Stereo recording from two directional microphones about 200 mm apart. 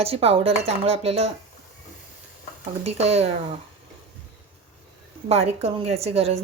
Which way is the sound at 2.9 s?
30° right (ahead or behind).